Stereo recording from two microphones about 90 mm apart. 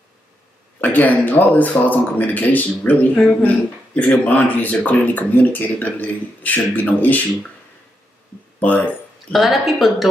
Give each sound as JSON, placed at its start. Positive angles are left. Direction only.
{"t": 0.7, "sound": "speech", "side_deg": 20}
{"t": 8.5, "sound": "speech", "side_deg": 20}
{"t": 9.3, "sound": "speech", "side_deg": 0}